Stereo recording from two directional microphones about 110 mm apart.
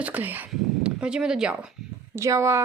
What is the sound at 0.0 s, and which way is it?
Speech, 15° right (ahead or behind).